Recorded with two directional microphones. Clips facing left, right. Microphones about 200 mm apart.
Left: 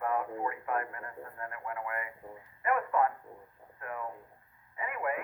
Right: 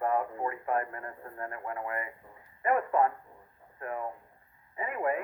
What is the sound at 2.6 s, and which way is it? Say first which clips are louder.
Dog: right 2 dB; 30° right (ahead or behind).